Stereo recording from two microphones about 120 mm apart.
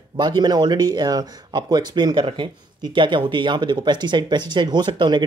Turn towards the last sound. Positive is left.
turn(degrees=-40)  # may be behind; listen again after turning